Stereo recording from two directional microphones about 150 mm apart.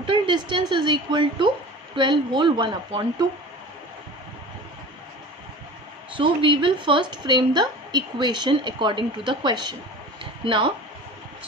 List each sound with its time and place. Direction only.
0.0 s a woman's voice: 35° right (ahead or behind)
6.1 s a woman's voice: 35° right (ahead or behind)